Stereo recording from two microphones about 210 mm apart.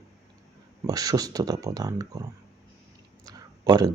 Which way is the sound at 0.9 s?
15° right (ahead or behind).